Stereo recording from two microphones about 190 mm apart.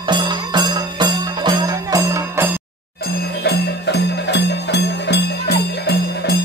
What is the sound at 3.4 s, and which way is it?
Music, 60° left (ahead or behind).